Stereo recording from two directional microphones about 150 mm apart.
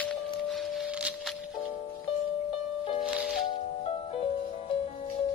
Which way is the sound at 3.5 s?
40° left (ahead or behind).